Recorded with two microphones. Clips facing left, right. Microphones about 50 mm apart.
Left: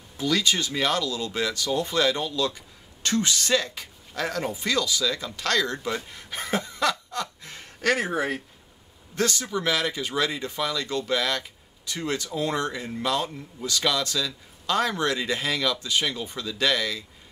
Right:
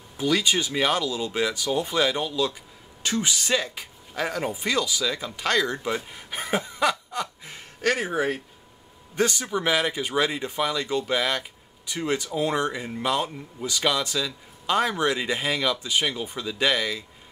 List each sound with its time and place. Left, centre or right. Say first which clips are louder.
0.2 s a man's voice: right 1 dB; centre
9.1 s a man's voice: right 2 dB; centre